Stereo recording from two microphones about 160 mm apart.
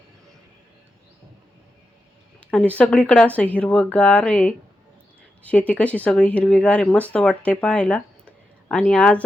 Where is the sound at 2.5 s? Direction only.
10° left (ahead or behind).